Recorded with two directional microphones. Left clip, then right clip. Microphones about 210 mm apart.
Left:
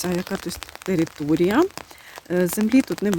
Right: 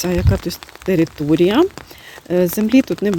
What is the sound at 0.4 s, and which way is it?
Speech, centre (ahead or behind).